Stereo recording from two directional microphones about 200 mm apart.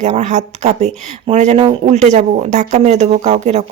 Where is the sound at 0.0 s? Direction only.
35° right (ahead or behind).